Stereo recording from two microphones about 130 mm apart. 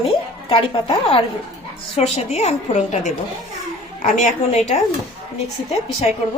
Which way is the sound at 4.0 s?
90° left.